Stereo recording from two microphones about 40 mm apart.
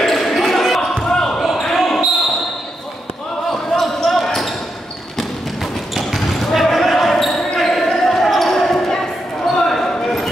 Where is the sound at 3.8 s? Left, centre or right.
Centre.